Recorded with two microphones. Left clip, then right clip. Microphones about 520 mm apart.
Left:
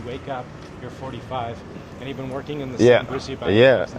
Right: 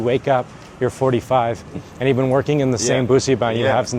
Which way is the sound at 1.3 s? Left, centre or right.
Right.